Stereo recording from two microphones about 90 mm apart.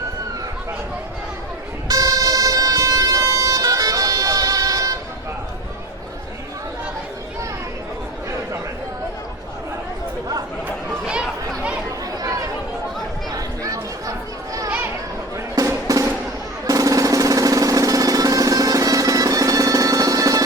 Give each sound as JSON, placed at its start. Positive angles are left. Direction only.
{"t": 1.9, "sound": "vehicle", "side_deg": -40}
{"t": 13.3, "sound": "chatter", "side_deg": -40}
{"t": 15.5, "sound": "music", "side_deg": -35}